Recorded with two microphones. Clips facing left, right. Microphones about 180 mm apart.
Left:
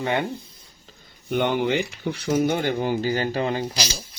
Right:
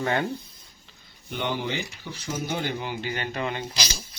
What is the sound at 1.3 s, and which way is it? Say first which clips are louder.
Speech: left 8 dB; 55° left (ahead or behind).